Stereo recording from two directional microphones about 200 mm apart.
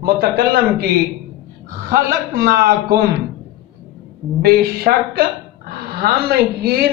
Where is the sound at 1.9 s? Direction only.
50° right (ahead or behind).